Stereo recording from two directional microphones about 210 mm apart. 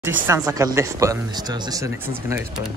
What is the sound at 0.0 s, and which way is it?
Speech, 15° right (ahead or behind).